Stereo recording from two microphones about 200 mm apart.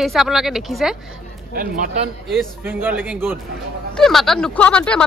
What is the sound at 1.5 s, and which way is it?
Speech, 45° right (ahead or behind).